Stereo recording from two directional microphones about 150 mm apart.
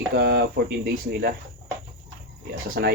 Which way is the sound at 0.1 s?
90° right.